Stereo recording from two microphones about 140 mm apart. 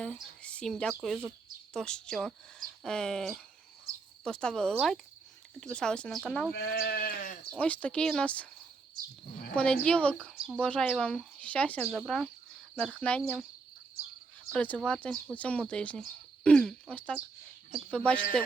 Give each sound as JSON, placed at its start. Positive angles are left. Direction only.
{"t": 0.0, "sound": "speech", "side_deg": 5}
{"t": 6.6, "sound": "sheep", "side_deg": 90}
{"t": 7.5, "sound": "speech", "side_deg": 10}
{"t": 9.0, "sound": "speech", "side_deg": -90}
{"t": 9.6, "sound": "speech", "side_deg": 5}
{"t": 10.3, "sound": "speech", "side_deg": -5}
{"t": 10.6, "sound": "speech", "side_deg": 10}
{"t": 14.5, "sound": "speech", "side_deg": 10}